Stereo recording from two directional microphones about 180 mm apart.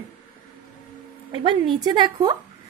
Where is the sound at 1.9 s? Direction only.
25° right (ahead or behind).